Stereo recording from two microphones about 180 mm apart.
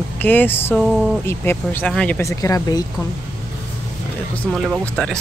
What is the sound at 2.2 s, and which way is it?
Speech, 20° left (ahead or behind).